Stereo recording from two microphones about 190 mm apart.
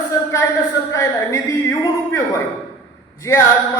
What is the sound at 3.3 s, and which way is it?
Speech, 15° left (ahead or behind).